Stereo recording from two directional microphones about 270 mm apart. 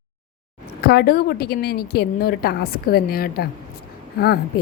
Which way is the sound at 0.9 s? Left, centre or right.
Left.